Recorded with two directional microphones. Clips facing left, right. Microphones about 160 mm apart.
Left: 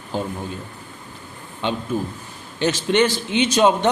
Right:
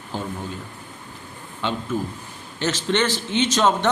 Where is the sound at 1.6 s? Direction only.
20° left (ahead or behind).